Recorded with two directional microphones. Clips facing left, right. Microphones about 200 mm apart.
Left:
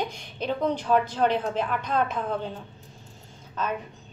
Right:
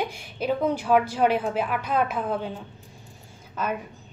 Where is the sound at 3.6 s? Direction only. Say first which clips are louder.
Right 1 dB; 10° right (ahead or behind).